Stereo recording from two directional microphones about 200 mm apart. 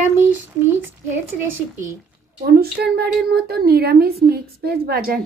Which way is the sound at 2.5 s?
55° right (ahead or behind).